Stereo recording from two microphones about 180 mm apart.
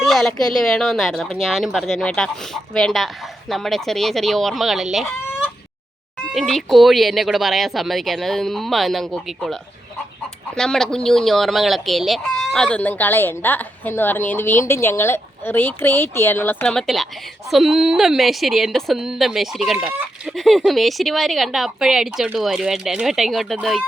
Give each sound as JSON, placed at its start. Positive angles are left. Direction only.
{"t": 0.0, "sound": "speech", "side_deg": 0}
{"t": 6.3, "sound": "speech", "side_deg": 0}